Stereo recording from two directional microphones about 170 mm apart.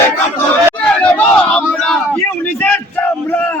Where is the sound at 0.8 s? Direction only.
5° left (ahead or behind).